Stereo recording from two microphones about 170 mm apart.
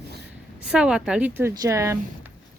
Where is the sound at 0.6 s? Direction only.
5° right (ahead or behind).